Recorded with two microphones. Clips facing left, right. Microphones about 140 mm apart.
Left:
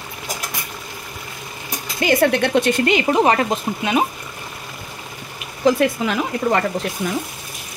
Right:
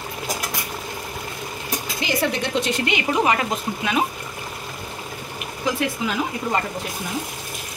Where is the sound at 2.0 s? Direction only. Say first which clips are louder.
Left 8 dB; 60° left (ahead or behind).